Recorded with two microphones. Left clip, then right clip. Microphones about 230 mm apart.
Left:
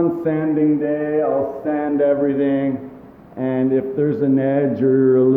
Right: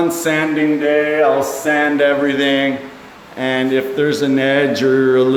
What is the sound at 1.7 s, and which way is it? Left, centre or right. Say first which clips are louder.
Speech: right 4 dB; centre.